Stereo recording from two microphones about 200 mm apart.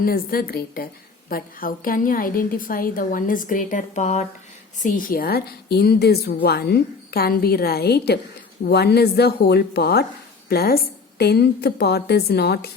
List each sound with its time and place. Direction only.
0.0 s a woman's voice: 45° left (ahead or behind)